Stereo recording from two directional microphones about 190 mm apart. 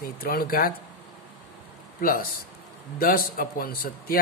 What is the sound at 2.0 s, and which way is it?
A man's voice, 50° left (ahead or behind).